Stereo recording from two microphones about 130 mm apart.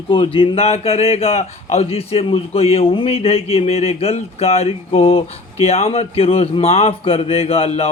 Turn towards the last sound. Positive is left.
turn(degrees=50)  # may be behind; listen again after turning